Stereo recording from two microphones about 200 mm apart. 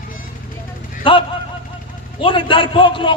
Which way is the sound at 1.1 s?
25° left (ahead or behind).